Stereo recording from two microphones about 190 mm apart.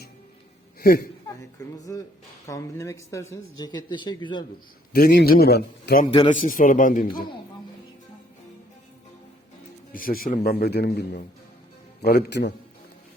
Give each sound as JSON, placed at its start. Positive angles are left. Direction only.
{"t": 0.8, "sound": "speech", "side_deg": 55}
{"t": 1.8, "sound": "speech", "side_deg": 20}
{"t": 4.9, "sound": "a man's voice", "side_deg": 50}
{"t": 6.1, "sound": "speech", "side_deg": 25}
{"t": 6.3, "sound": "a man's voice", "side_deg": 45}
{"t": 9.9, "sound": "a man's voice", "side_deg": 50}